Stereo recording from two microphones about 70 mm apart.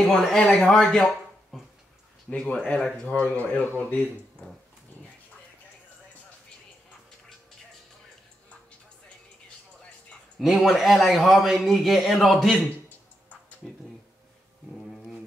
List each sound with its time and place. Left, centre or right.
0.0 s speech: centre
3.1 s speech: left
10.4 s a man's voice: centre